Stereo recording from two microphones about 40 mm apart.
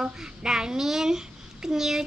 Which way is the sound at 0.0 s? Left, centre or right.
Centre.